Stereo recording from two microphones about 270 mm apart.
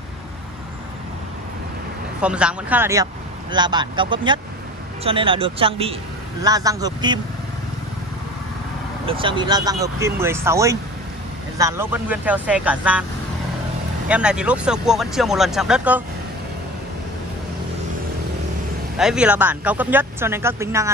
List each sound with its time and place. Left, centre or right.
2.2 s speech: centre
9.0 s speech: centre
14.0 s speech: centre
18.9 s speech: centre